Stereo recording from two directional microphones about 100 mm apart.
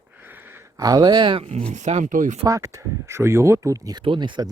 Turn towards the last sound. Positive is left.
turn(degrees=-50)  # may be behind; listen again after turning